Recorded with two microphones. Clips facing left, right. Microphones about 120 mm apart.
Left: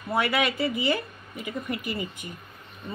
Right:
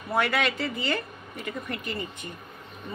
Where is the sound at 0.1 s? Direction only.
5° left (ahead or behind).